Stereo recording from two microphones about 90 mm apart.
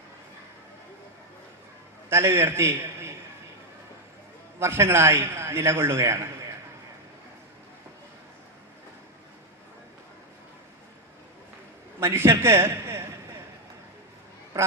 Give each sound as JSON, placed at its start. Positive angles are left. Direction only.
{"t": 2.0, "sound": "a man's voice", "side_deg": -30}
{"t": 4.6, "sound": "a man's voice", "side_deg": -30}
{"t": 11.9, "sound": "a sound", "side_deg": -30}
{"t": 14.5, "sound": "a man's voice", "side_deg": -30}